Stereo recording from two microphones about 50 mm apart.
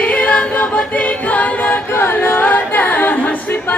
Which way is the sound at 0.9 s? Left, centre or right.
Left.